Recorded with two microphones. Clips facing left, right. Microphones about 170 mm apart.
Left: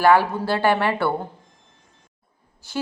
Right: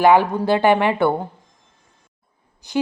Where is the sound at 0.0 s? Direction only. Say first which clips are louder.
Right 3 dB; 20° right (ahead or behind).